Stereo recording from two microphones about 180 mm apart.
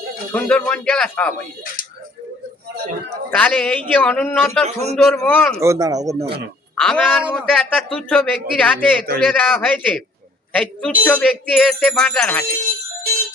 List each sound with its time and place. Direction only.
0.3 s music: 5° left (ahead or behind)
3.2 s music: 10° left (ahead or behind)
4.6 s a man's voice: 40° right (ahead or behind)
5.1 s music: 10° left (ahead or behind)
5.5 s speech: 15° right (ahead or behind)
6.7 s a man's voice: 5° left (ahead or behind)
9.2 s music: 5° left (ahead or behind)
10.5 s a woman's voice: 5° left (ahead or behind)
11.0 s music: 5° left (ahead or behind)